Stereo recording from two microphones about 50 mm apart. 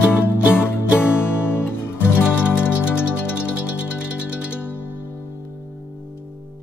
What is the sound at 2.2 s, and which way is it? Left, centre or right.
Music, right.